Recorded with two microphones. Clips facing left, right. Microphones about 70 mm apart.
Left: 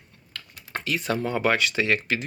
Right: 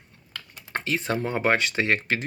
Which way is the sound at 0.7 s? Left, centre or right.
Right.